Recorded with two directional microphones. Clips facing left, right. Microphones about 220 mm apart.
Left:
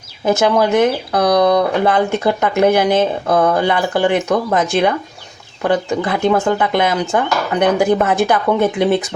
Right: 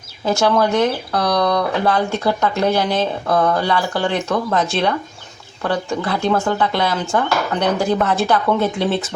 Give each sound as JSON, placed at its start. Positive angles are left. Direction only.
{"t": 0.3, "sound": "speech", "side_deg": 20}